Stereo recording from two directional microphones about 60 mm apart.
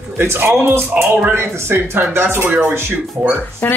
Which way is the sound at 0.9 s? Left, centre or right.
Right.